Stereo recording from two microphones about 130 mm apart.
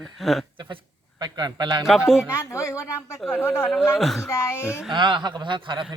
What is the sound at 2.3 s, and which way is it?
A woman's voice, 25° left (ahead or behind).